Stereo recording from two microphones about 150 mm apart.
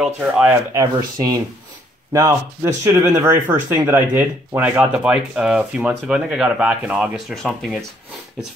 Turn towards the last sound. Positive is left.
turn(degrees=0)  # may be behind; listen again after turning